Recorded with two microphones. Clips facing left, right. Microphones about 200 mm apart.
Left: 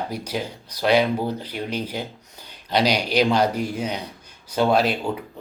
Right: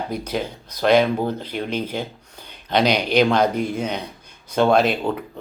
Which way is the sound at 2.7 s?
55° right (ahead or behind).